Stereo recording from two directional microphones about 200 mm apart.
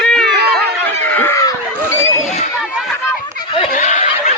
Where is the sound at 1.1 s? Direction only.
10° left (ahead or behind).